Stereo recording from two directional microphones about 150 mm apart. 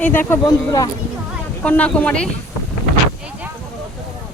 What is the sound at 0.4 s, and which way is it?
Speech, 25° left (ahead or behind).